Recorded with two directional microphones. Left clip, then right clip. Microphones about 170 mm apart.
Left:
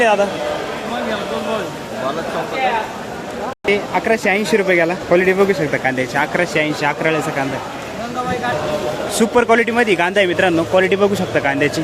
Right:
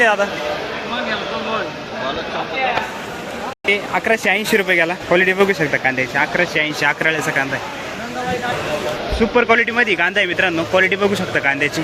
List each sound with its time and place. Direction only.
0.0 s speech: 5° left (ahead or behind)
3.7 s speech: centre (ahead or behind)
9.3 s speech: 25° left (ahead or behind)